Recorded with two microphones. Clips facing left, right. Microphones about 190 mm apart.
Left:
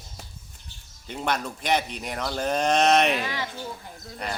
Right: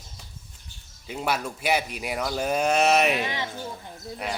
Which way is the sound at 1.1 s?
5° right (ahead or behind).